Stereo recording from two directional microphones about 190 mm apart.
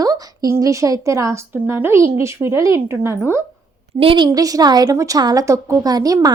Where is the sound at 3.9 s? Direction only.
25° right (ahead or behind).